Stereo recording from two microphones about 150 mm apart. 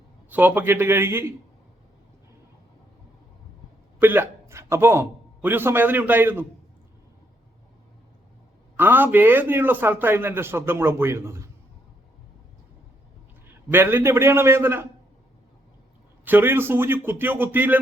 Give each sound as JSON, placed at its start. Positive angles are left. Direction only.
{"t": 0.3, "sound": "a man's voice", "side_deg": -10}
{"t": 4.0, "sound": "a man's voice", "side_deg": -15}
{"t": 8.7, "sound": "a man's voice", "side_deg": -15}
{"t": 13.5, "sound": "a man's voice", "side_deg": -15}
{"t": 16.2, "sound": "a man's voice", "side_deg": -15}